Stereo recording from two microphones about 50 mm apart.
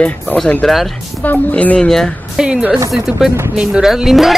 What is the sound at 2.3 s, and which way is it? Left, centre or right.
A woman's voice, centre.